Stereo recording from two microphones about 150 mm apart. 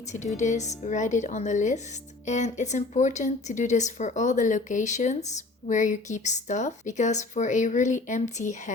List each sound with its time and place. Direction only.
0.1 s speech: 50° left (ahead or behind)